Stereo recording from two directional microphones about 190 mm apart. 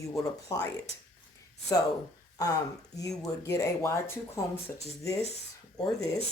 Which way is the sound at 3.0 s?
20° left (ahead or behind).